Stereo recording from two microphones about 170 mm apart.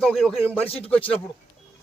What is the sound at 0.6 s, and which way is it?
Speech, 35° left (ahead or behind).